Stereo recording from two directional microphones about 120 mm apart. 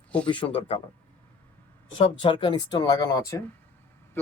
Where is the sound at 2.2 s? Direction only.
40° left (ahead or behind).